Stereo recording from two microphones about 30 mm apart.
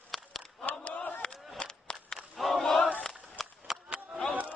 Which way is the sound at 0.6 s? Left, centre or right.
Left.